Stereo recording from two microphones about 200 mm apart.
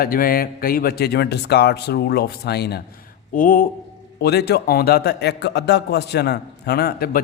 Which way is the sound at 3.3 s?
45° left (ahead or behind).